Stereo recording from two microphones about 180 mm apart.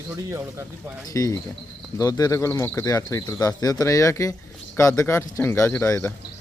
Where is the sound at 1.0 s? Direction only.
20° left (ahead or behind).